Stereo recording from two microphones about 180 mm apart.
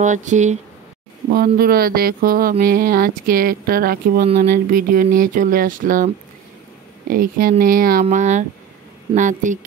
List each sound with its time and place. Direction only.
0.0 s speech: 40° right (ahead or behind)
1.3 s speech: 55° right (ahead or behind)